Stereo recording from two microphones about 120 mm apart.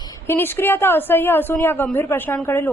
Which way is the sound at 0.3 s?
15° left (ahead or behind).